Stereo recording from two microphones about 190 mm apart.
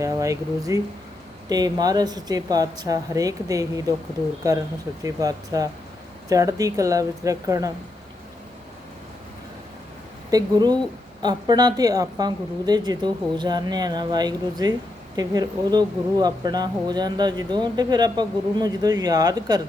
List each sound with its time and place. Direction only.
0.0 s speech: 15° right (ahead or behind)
10.3 s speech: 20° right (ahead or behind)